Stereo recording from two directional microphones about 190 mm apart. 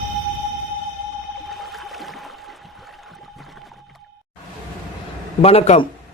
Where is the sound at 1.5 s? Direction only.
Centre (ahead or behind).